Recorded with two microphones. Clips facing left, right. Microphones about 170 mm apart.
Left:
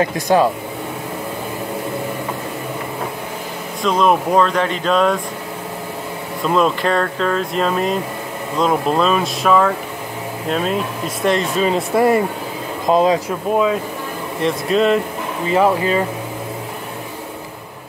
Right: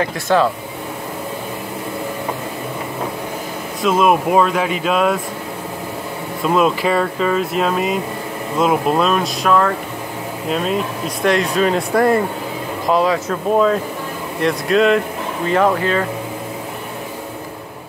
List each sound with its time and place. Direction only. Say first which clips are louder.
0.0 s speech: left 1 dB; 15° left (ahead or behind)
3.8 s speech: right 1 dB; 5° right (ahead or behind)
6.4 s speech: right 1 dB; 5° right (ahead or behind)
12.8 s speech: left 2 dB; 20° left (ahead or behind)
14.4 s speech: right 1 dB; centre (ahead or behind)